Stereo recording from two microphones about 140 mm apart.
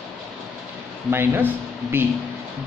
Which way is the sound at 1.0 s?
15° right (ahead or behind).